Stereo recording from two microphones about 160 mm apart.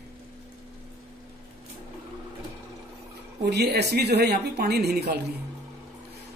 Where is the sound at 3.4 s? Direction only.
90° right.